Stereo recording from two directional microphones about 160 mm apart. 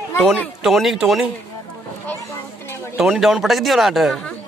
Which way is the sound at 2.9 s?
Centre (ahead or behind).